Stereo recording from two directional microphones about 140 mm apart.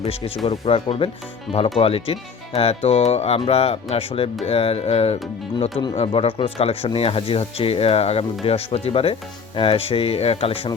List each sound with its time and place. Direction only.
0.0 s speech: 45° left (ahead or behind)
1.5 s speech: centre (ahead or behind)
1.8 s speech: 45° left (ahead or behind)